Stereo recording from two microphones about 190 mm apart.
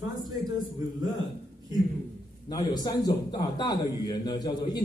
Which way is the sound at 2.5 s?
20° left (ahead or behind).